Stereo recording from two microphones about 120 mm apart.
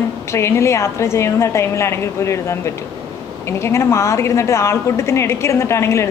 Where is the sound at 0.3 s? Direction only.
25° left (ahead or behind).